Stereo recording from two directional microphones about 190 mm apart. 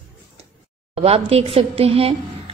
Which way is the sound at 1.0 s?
30° right (ahead or behind).